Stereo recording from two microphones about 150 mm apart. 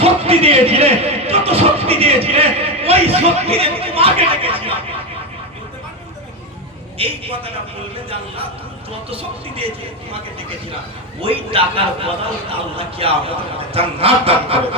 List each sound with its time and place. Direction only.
0.0 s speech: 40° right (ahead or behind)
7.0 s a man's voice: 40° right (ahead or behind)
9.0 s a man's voice: 40° right (ahead or behind)
11.2 s a man's voice: 40° right (ahead or behind)